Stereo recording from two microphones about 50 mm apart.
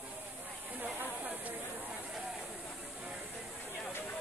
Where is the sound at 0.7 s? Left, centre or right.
Right.